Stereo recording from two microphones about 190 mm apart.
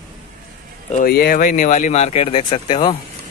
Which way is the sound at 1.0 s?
55° left (ahead or behind).